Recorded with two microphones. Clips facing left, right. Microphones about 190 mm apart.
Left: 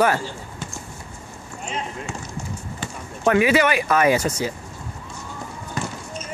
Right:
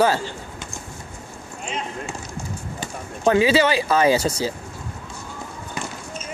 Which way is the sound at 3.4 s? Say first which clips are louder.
Even; 30° right (ahead or behind).